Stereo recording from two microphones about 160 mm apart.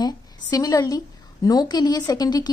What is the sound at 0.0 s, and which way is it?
A woman's voice, 25° left (ahead or behind).